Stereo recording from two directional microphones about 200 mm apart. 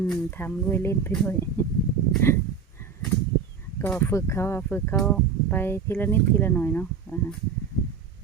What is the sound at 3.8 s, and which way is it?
Speech, 10° left (ahead or behind).